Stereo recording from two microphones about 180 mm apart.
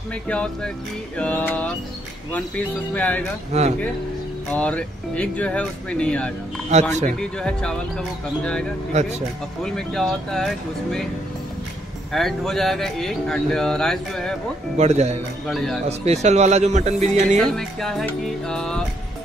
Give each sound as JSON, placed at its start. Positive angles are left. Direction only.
{"t": 0.3, "sound": "speech", "side_deg": 5}
{"t": 2.9, "sound": "speech", "side_deg": 10}
{"t": 3.5, "sound": "a man's voice", "side_deg": -35}
{"t": 4.5, "sound": "speech", "side_deg": 5}
{"t": 6.7, "sound": "a man's voice", "side_deg": -40}
{"t": 7.2, "sound": "speech", "side_deg": 5}
{"t": 9.6, "sound": "speech", "side_deg": 0}
{"t": 12.1, "sound": "speech", "side_deg": 0}
{"t": 14.8, "sound": "a man's voice", "side_deg": -35}
{"t": 15.4, "sound": "speech", "side_deg": 0}
{"t": 15.9, "sound": "a man's voice", "side_deg": -40}
{"t": 17.4, "sound": "speech", "side_deg": 0}